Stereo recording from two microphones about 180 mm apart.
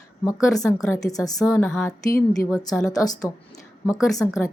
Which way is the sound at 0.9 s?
20° left (ahead or behind).